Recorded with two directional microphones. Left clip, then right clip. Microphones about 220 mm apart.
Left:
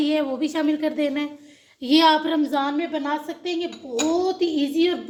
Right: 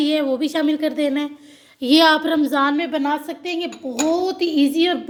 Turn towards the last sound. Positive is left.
turn(degrees=-40)  # may be behind; listen again after turning